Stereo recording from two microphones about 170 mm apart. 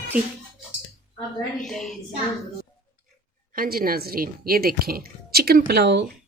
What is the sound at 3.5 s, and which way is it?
Speech, 60° right (ahead or behind).